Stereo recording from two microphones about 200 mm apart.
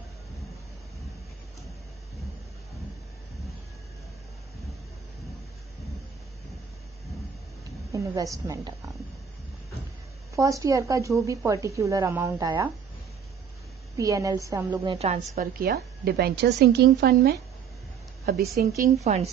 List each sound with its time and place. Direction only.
7.9 s a woman's voice: 15° right (ahead or behind)
10.3 s a woman's voice: 15° right (ahead or behind)
13.9 s a woman's voice: 15° right (ahead or behind)
14.8 s a woman's voice: 30° right (ahead or behind)
15.3 s a woman's voice: 50° right (ahead or behind)